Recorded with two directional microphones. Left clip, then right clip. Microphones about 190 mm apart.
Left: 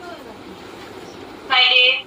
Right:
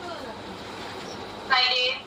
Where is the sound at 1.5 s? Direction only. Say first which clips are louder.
Left 9 dB; 10° right (ahead or behind).